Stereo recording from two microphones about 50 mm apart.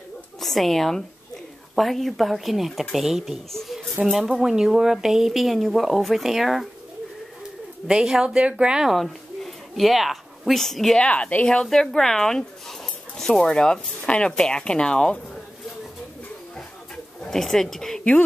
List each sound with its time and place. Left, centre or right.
0.4 s a woman's voice: centre
3.5 s a sound: centre
4.3 s speech: centre
7.9 s speech: centre
8.4 s speech: right
8.9 s speech: centre
11.0 s speech: left
11.4 s speech: centre
16.5 s a sound: centre